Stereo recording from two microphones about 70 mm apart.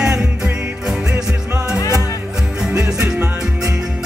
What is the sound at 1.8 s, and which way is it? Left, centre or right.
Music, left.